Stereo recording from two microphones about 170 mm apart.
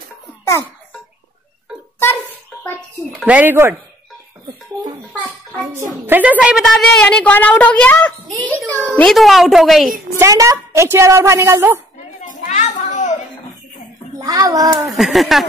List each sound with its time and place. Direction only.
3.2 s a woman's voice: 10° right (ahead or behind)
6.0 s a woman's voice: 10° right (ahead or behind)
10.1 s a woman's voice: 20° right (ahead or behind)
12.3 s a sound: 45° left (ahead or behind)
14.1 s a child's voice: 20° right (ahead or behind)
14.9 s a child's voice: centre (ahead or behind)